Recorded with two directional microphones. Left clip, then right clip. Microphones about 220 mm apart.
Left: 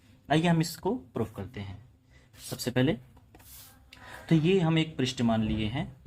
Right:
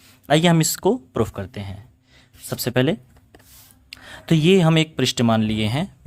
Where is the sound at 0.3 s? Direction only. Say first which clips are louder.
Right 10 dB; 45° right (ahead or behind).